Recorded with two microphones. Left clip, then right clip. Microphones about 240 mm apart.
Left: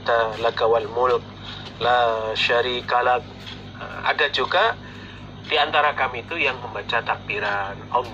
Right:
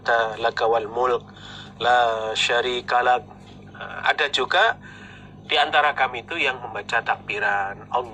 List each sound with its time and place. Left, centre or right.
0.1 s a man's voice: right